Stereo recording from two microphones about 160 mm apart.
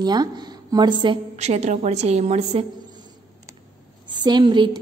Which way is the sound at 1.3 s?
45° right (ahead or behind).